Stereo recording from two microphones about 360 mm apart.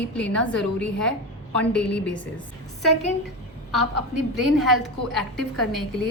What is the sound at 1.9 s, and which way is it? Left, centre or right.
Speech, left.